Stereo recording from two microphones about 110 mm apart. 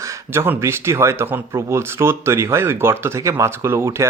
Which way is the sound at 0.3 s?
20° right (ahead or behind).